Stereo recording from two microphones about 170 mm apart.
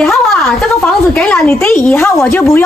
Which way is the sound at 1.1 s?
10° left (ahead or behind).